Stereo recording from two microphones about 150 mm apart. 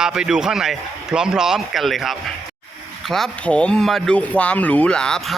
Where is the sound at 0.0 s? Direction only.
5° right (ahead or behind).